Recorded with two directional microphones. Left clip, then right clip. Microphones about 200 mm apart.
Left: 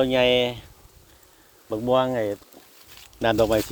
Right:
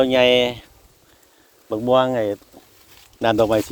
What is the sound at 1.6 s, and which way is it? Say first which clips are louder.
Speech: right 4 dB; 55° right (ahead or behind).